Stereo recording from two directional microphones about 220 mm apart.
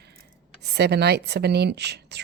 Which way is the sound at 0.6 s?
50° right (ahead or behind).